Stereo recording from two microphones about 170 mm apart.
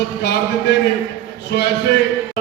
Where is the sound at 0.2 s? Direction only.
90° left.